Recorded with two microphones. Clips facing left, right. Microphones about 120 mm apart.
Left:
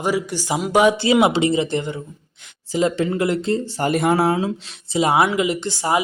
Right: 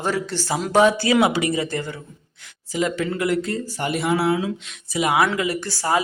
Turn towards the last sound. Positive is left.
turn(degrees=20)  # may be behind; listen again after turning